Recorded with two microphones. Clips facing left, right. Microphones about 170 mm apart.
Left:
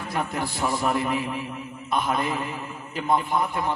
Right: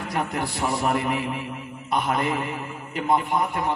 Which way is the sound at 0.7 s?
65° right (ahead or behind).